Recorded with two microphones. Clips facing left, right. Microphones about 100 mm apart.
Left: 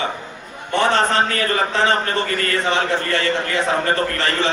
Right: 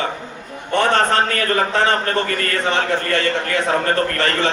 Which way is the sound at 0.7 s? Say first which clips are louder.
Right 1 dB; 50° right (ahead or behind).